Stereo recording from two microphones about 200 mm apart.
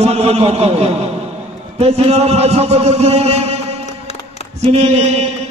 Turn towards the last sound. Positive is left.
turn(degrees=-35)  # may be behind; listen again after turning